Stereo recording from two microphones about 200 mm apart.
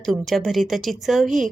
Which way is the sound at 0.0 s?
Centre (ahead or behind).